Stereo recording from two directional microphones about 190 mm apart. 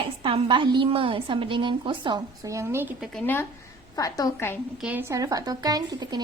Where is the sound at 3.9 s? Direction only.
20° left (ahead or behind).